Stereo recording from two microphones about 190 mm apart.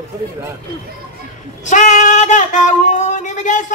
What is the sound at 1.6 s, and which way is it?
Singing, 40° left (ahead or behind).